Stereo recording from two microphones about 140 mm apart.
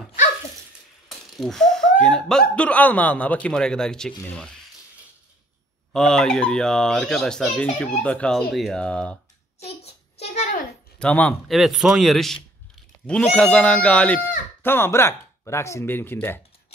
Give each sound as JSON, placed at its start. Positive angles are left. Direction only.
{"t": 1.0, "sound": "speech", "side_deg": 0}
{"t": 5.9, "sound": "speech", "side_deg": 5}
{"t": 9.6, "sound": "a sound", "side_deg": 45}
{"t": 11.0, "sound": "speech", "side_deg": 10}